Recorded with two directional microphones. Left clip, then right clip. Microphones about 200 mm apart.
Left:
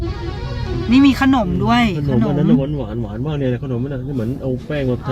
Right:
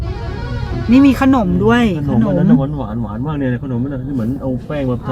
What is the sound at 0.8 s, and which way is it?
Speech, centre (ahead or behind).